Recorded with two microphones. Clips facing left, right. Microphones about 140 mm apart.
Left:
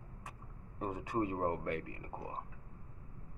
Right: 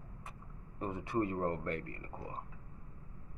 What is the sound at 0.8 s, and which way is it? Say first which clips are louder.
Speech: right 1 dB; 15° left (ahead or behind).